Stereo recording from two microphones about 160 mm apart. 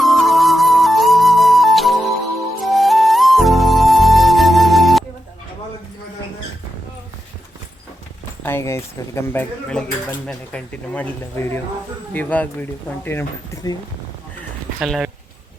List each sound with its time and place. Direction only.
0.0 s music: centre (ahead or behind)
8.4 s speech: 15° left (ahead or behind)
14.8 s speech: centre (ahead or behind)